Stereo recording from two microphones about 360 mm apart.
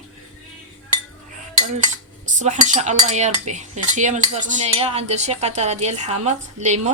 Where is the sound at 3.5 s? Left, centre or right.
Centre.